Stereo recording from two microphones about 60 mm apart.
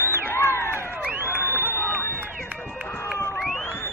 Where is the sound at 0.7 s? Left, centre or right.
Right.